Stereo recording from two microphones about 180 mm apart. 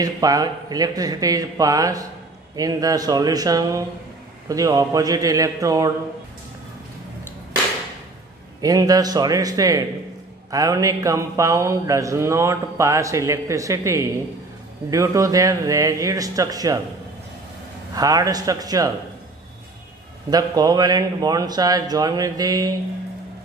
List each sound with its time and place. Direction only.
0.0 s a man's voice: 20° right (ahead or behind)
8.5 s a man's voice: 20° right (ahead or behind)
17.9 s a man's voice: 20° right (ahead or behind)
20.2 s a man's voice: 20° right (ahead or behind)